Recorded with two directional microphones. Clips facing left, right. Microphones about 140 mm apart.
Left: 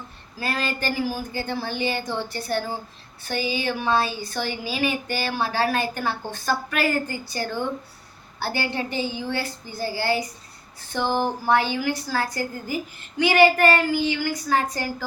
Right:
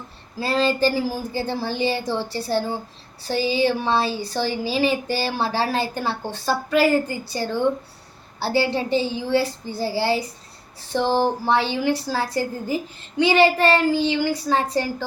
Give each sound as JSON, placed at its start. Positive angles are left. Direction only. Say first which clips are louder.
{"t": 0.3, "sound": "a woman's voice", "louder": "right 7 dB", "side_deg": -30}